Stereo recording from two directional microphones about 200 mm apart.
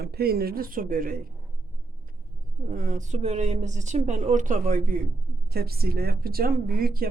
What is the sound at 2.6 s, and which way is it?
A woman's voice, 40° right (ahead or behind).